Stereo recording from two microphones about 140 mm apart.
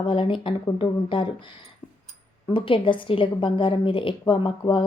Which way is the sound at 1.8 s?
35° left (ahead or behind).